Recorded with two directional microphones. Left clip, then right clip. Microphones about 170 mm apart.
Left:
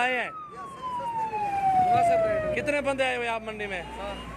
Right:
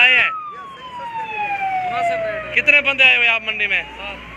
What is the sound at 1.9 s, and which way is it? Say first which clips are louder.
Speech: right 1 dB; 90° left.